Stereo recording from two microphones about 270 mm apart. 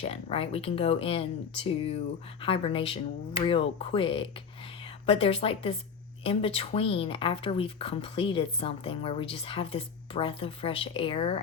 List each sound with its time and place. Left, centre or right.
0.0 s speech: left